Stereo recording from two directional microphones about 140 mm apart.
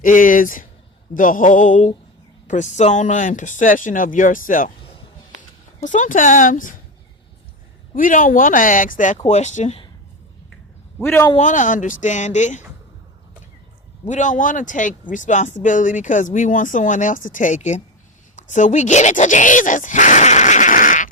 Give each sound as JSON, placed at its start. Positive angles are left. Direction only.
{"t": 0.0, "sound": "speech", "side_deg": 70}
{"t": 7.9, "sound": "speech", "side_deg": 70}
{"t": 9.2, "sound": "speech", "side_deg": 55}
{"t": 11.3, "sound": "speech", "side_deg": 65}
{"t": 14.1, "sound": "speech", "side_deg": 65}
{"t": 18.3, "sound": "a sound", "side_deg": 60}